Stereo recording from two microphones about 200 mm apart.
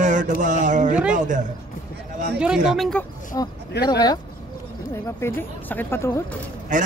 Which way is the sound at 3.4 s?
20° left (ahead or behind).